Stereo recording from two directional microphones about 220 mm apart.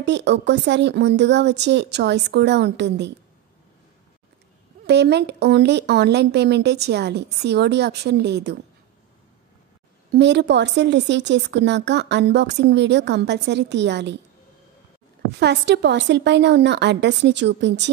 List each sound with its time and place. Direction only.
0.0 s a woman's voice: 50° right (ahead or behind)
4.8 s a woman's voice: 50° right (ahead or behind)
10.1 s a woman's voice: 50° right (ahead or behind)
15.3 s a woman's voice: 50° right (ahead or behind)